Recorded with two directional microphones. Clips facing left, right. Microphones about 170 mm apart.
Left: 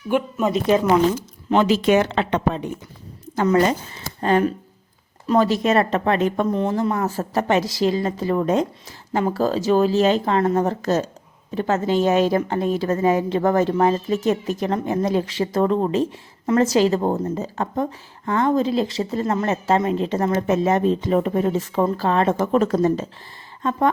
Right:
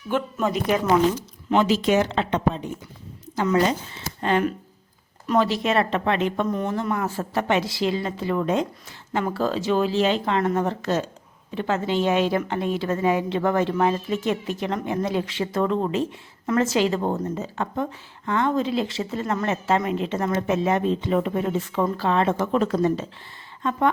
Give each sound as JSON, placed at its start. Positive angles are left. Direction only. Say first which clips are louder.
{"t": 0.1, "sound": "speech", "louder": "left 3 dB", "side_deg": 15}
{"t": 1.5, "sound": "speech", "louder": "left 3 dB", "side_deg": 60}
{"t": 3.3, "sound": "speech", "louder": "left 3 dB", "side_deg": 50}
{"t": 6.6, "sound": "speech", "louder": "left 4 dB", "side_deg": 30}